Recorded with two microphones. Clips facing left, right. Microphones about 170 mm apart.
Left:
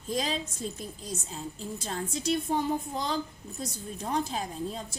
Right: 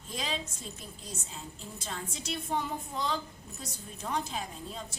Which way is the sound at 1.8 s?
40° left (ahead or behind).